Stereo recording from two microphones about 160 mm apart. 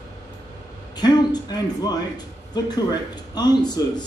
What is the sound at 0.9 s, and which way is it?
A man's voice, 25° left (ahead or behind).